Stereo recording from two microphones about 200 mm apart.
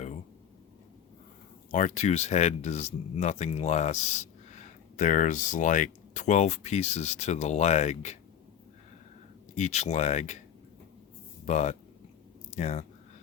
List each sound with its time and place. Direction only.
1.7 s speech: 35° left (ahead or behind)
9.6 s speech: 35° left (ahead or behind)
11.4 s speech: 35° left (ahead or behind)